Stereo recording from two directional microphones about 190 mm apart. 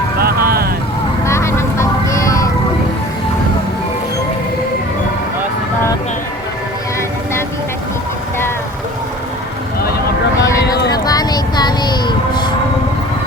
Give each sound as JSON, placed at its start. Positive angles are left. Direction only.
{"t": 0.2, "sound": "vehicle", "side_deg": -50}
{"t": 1.2, "sound": "vehicle", "side_deg": 15}
{"t": 10.8, "sound": "music", "side_deg": 20}